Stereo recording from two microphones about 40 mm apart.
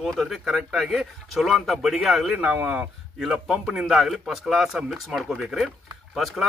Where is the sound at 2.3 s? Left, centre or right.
Right.